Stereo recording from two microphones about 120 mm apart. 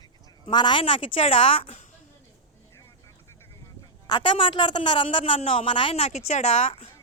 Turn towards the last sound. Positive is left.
turn(degrees=65)  # may be behind; listen again after turning